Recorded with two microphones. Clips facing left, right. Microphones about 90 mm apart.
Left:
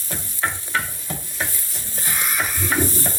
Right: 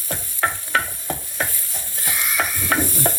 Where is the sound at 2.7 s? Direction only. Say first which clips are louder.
Right 1 dB; 55° right (ahead or behind).